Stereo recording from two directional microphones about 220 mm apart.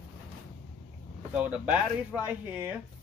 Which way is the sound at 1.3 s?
5° right (ahead or behind).